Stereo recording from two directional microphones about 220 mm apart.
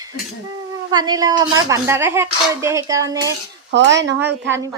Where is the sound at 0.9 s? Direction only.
20° right (ahead or behind).